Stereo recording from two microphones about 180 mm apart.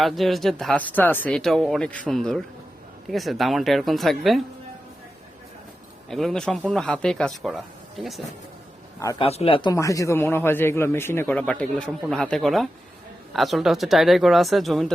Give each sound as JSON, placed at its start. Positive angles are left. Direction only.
{"t": 0.0, "sound": "speech", "side_deg": 0}
{"t": 6.1, "sound": "speech", "side_deg": 0}
{"t": 9.0, "sound": "speech", "side_deg": 15}
{"t": 9.2, "sound": "speech", "side_deg": 30}